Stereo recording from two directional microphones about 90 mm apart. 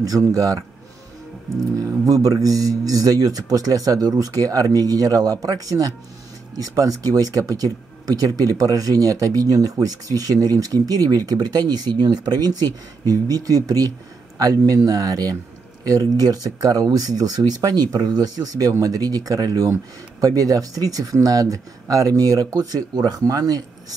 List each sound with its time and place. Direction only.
0.0 s speech: 40° right (ahead or behind)
1.8 s speech: 40° right (ahead or behind)